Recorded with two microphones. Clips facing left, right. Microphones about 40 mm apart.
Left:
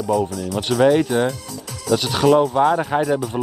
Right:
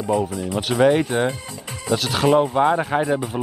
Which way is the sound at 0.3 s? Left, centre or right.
Right.